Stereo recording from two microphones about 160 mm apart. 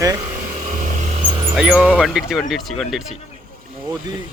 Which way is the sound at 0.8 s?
50° right (ahead or behind).